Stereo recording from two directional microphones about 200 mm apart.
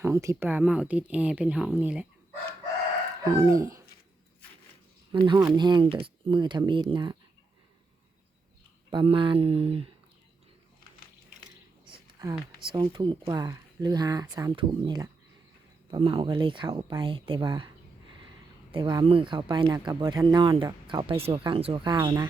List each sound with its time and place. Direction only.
0.0 s speech: 15° right (ahead or behind)
3.2 s speech: 15° right (ahead or behind)
5.1 s speech: 25° right (ahead or behind)
8.9 s speech: 25° right (ahead or behind)
11.9 s a sound: 15° right (ahead or behind)
12.6 s speech: 25° right (ahead or behind)
18.7 s speech: 25° right (ahead or behind)